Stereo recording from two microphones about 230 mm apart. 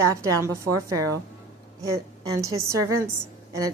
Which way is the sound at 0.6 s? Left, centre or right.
Right.